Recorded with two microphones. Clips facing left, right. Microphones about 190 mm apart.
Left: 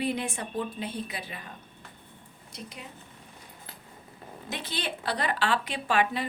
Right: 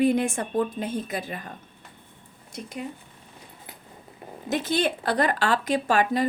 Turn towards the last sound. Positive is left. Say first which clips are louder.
# right 5 dB
turn(degrees=-40)  # may be behind; listen again after turning